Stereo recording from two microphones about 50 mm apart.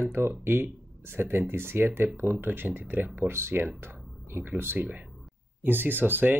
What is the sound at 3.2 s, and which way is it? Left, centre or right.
Speech, right.